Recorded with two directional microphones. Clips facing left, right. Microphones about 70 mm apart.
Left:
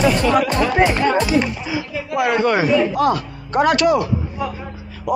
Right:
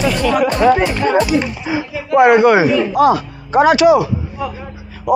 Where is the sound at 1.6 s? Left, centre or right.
Right.